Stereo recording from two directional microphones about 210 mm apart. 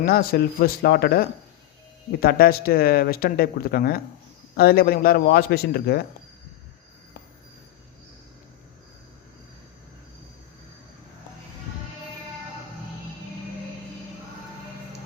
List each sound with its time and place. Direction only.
0.0 s speech: 45° left (ahead or behind)